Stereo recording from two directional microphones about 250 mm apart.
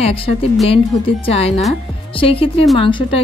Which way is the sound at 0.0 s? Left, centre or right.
Left.